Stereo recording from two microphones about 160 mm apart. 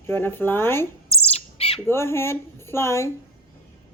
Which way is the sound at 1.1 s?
40° left (ahead or behind).